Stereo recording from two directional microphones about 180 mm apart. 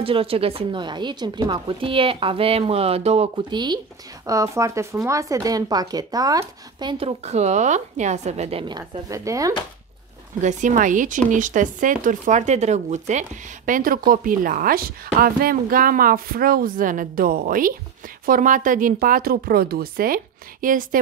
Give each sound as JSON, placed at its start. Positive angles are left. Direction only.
{"t": 0.0, "sound": "speech", "side_deg": -30}
{"t": 10.4, "sound": "speech", "side_deg": -45}